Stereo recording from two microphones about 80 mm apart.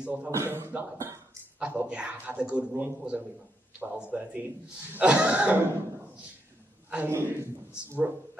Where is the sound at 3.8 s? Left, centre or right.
Centre.